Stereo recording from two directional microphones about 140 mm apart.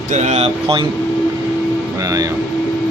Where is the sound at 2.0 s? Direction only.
25° right (ahead or behind).